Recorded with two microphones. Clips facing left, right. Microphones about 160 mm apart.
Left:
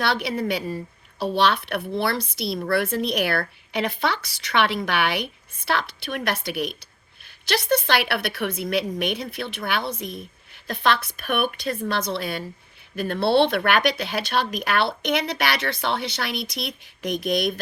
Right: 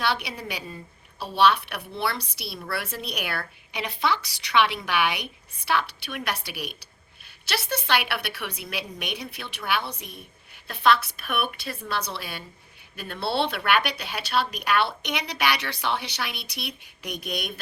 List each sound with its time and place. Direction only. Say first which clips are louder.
0.1 s speech: left 6 dB; 50° left (ahead or behind)
1.7 s speech: left 6 dB; 55° left (ahead or behind)
8.0 s speech: left 6 dB; 55° left (ahead or behind)